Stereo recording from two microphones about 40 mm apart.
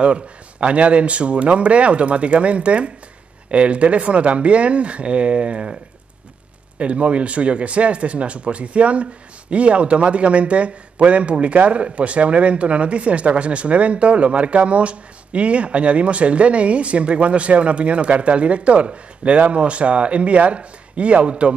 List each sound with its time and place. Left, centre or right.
0.0 s speech: right
6.8 s speech: right